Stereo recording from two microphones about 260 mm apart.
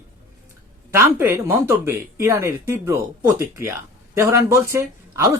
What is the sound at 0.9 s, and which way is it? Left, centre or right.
Speech, centre.